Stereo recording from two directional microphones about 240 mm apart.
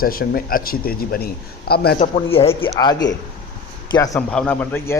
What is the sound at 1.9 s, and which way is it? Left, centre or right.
A man's voice, left.